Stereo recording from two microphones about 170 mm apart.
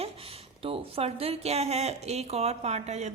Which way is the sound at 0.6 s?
35° right (ahead or behind).